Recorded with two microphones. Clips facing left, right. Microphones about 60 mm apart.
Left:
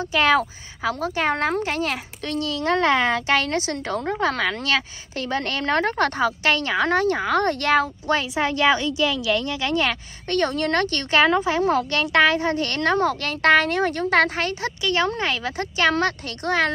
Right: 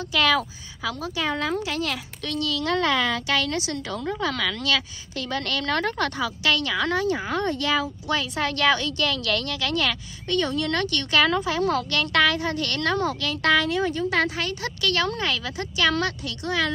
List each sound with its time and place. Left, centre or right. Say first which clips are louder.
0.0 s a woman's voice: left 3 dB; left
8.1 s a woman's voice: left 3 dB; left
10.2 s a woman's voice: left 2 dB; left
14.4 s a woman's voice: left 2 dB; left